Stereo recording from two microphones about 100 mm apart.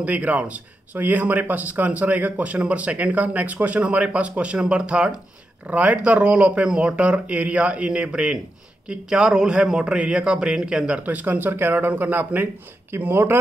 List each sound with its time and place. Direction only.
0.0 s speech: 15° right (ahead or behind)